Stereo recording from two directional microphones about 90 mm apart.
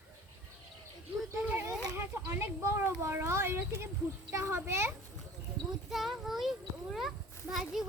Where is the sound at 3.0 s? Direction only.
30° right (ahead or behind).